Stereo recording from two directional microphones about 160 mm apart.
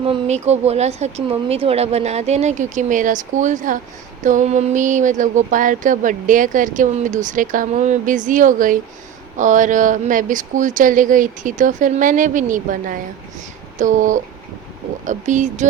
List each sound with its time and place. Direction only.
0.0 s speech: 40° right (ahead or behind)